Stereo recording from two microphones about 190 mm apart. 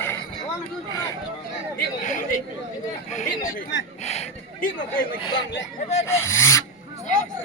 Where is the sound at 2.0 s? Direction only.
40° left (ahead or behind).